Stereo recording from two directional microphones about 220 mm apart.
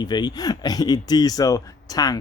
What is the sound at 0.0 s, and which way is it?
Speech, 20° left (ahead or behind).